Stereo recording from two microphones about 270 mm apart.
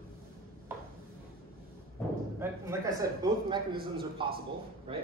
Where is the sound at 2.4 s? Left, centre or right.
Centre.